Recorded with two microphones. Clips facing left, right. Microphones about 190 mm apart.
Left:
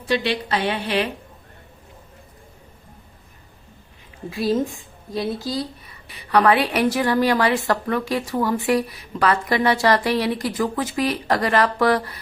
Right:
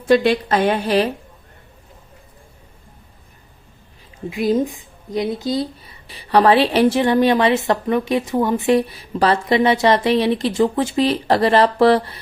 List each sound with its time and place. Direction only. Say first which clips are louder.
0.0 s a woman's voice: right 8 dB; 50° right (ahead or behind)
4.3 s speech: right 3 dB; 15° right (ahead or behind)